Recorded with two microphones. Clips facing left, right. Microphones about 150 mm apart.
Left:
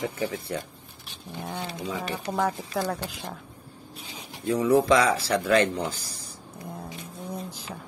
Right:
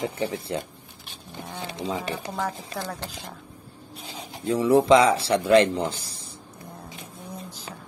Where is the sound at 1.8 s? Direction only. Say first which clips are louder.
Right 6 dB; 25° right (ahead or behind).